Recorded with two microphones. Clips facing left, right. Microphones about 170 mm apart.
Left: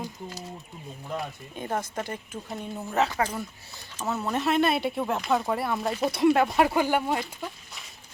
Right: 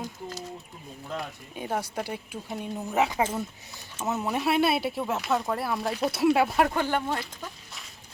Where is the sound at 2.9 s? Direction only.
15° right (ahead or behind); by 7.2 s 10° left (ahead or behind).